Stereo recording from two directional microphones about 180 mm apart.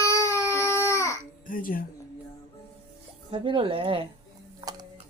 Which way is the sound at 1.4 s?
50° left (ahead or behind).